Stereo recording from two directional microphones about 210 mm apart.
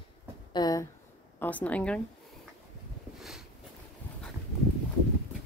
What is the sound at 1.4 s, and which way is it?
Speech, 5° left (ahead or behind).